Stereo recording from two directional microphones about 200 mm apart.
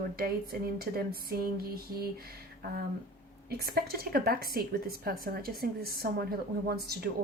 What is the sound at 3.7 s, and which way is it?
Speech, 50° right (ahead or behind).